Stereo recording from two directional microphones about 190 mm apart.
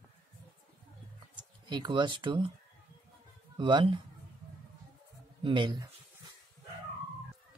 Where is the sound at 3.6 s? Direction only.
25° right (ahead or behind).